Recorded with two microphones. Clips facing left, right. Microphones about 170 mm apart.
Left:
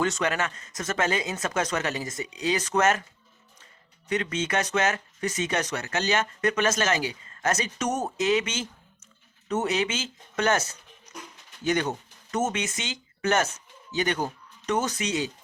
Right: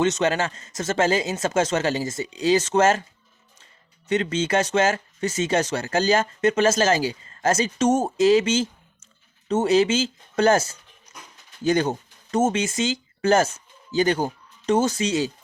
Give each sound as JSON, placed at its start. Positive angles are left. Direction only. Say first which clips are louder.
{"t": 0.0, "sound": "speech", "louder": "right 5 dB", "side_deg": -25}
{"t": 4.1, "sound": "speech", "louder": "right 5 dB", "side_deg": -30}
{"t": 11.6, "sound": "speech", "louder": "right 5 dB", "side_deg": -30}